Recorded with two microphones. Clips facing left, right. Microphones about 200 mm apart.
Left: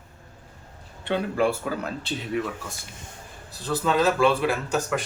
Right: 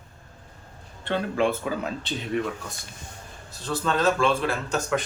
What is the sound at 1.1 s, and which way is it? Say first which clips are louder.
Speech: left 1 dB; 5° left (ahead or behind).